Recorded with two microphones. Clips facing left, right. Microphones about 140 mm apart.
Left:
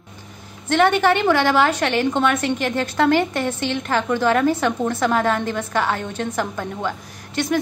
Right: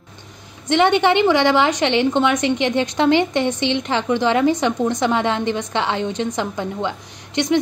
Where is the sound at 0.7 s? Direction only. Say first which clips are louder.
Right 1 dB; 20° right (ahead or behind).